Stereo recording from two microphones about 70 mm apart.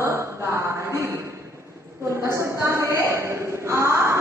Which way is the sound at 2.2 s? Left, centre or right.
Right.